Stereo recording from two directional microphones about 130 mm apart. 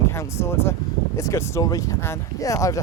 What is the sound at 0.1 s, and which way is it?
Speech, 20° left (ahead or behind).